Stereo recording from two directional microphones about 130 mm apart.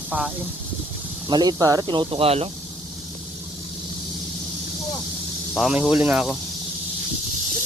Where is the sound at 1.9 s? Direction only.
40° right (ahead or behind).